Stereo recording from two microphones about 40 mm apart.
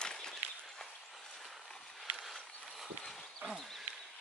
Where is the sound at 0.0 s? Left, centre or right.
Centre.